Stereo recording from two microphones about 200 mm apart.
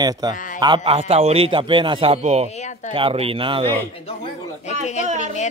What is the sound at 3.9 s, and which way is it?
Speech, 30° left (ahead or behind).